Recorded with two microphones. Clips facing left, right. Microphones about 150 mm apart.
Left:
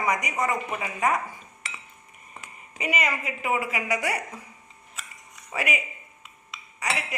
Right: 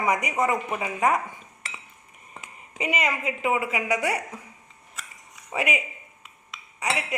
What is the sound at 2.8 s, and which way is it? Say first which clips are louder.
A woman's voice: right 1 dB; 25° right (ahead or behind).